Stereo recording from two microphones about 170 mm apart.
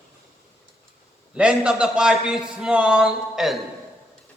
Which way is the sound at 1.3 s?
5° right (ahead or behind).